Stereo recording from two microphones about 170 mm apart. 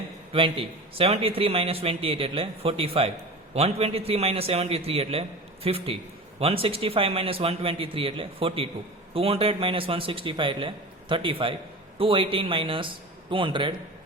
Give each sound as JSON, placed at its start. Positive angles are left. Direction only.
{"t": 0.3, "sound": "a man's voice", "side_deg": -30}